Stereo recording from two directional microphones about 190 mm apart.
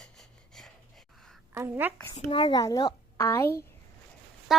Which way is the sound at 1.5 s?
10° right (ahead or behind).